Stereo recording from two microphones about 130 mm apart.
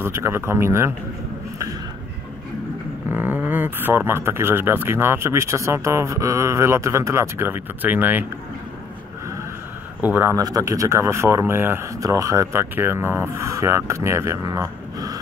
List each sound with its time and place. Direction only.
0.0 s speech: 20° right (ahead or behind)
3.1 s speech: 15° right (ahead or behind)
10.0 s speech: 15° right (ahead or behind)
10.3 s speech: 25° right (ahead or behind)